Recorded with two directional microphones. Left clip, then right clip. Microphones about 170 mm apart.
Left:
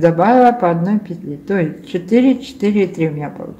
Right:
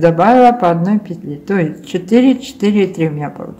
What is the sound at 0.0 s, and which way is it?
Speech, 20° right (ahead or behind).